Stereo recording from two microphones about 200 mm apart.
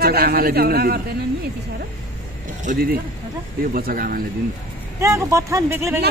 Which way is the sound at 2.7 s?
40° right (ahead or behind).